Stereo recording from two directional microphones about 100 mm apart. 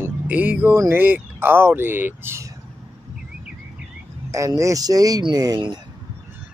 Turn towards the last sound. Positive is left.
turn(degrees=-45)  # may be behind; listen again after turning